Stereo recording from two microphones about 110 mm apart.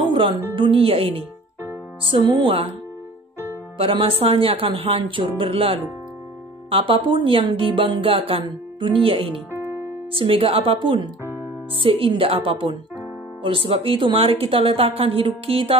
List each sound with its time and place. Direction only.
0.1 s music: 50° right (ahead or behind)
0.6 s a woman's voice: 55° right (ahead or behind)
2.0 s speech: 45° right (ahead or behind)
3.7 s a woman's voice: 55° right (ahead or behind)
8.5 s speech: 50° right (ahead or behind)
9.5 s music: 20° right (ahead or behind)
10.1 s a woman's voice: 55° right (ahead or behind)